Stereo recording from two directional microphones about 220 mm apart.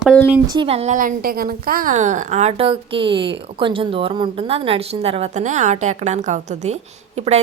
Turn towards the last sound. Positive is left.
turn(degrees=-30)  # may be behind; listen again after turning